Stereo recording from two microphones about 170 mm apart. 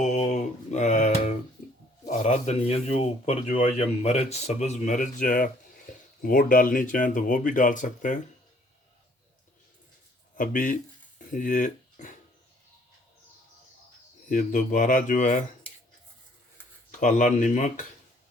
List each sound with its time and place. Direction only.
0.0 s mantra: 40° left (ahead or behind)
2.0 s speech: 40° left (ahead or behind)
10.3 s speech: 50° left (ahead or behind)
14.3 s speech: 50° left (ahead or behind)
16.9 s speech: 45° left (ahead or behind)